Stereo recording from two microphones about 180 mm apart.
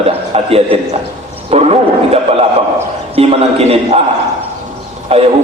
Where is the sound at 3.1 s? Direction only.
35° right (ahead or behind).